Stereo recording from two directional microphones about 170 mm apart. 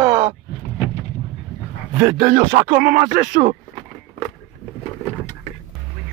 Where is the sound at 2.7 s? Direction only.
50° right (ahead or behind).